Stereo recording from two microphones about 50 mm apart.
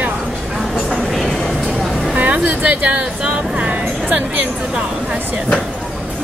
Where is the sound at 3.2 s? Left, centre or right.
Right.